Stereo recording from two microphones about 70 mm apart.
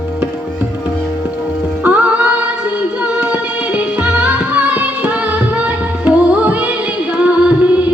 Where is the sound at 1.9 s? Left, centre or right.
Right.